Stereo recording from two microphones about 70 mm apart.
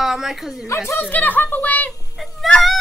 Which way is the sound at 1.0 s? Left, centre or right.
Left.